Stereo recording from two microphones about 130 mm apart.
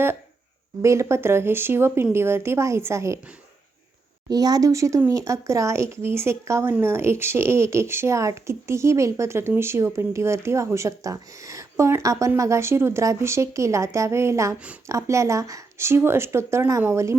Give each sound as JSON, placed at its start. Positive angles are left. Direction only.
{"t": 0.8, "sound": "a woman's voice", "side_deg": -20}
{"t": 4.3, "sound": "a woman's voice", "side_deg": -30}